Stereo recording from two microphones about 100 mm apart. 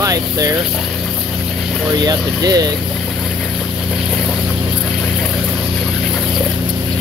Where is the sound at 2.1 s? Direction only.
40° right (ahead or behind).